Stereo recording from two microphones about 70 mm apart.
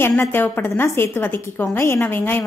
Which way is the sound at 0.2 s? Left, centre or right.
Left.